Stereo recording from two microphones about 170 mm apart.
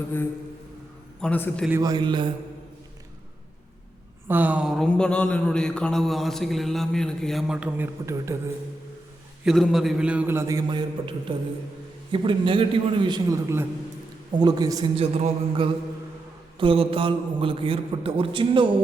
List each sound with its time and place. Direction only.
1.2 s a man's voice: 5° left (ahead or behind)
1.8 s a man's voice: 25° right (ahead or behind)
4.3 s speech: 10° right (ahead or behind)
9.4 s a man's voice: centre (ahead or behind); by 14.8 s 20° right (ahead or behind)
14.9 s a man's voice: 35° right (ahead or behind)